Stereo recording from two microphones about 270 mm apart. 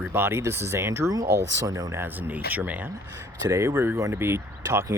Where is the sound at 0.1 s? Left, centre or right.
Centre.